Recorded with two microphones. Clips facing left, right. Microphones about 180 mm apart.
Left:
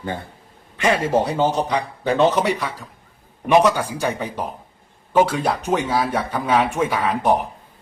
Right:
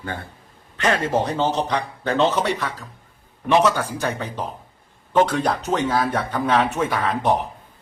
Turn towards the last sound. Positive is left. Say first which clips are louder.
# left 2 dB
turn(degrees=10)  # may be behind; listen again after turning